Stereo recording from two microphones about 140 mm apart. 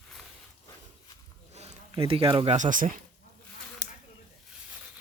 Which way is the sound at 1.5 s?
50° right (ahead or behind).